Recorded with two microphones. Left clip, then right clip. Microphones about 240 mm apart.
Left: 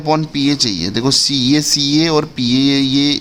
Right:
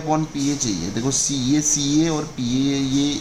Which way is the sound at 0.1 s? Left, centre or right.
Left.